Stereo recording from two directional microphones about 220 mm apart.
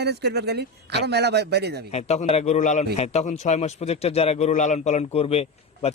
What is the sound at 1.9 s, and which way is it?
A man's voice, 30° left (ahead or behind).